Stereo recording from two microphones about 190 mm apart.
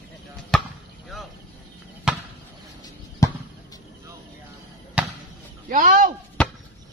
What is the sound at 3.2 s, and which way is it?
Basketball bounce, 15° left (ahead or behind).